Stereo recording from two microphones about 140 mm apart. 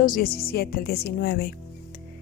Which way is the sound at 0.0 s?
85° left.